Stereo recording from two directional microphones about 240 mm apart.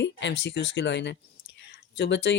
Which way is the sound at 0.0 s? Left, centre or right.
Left.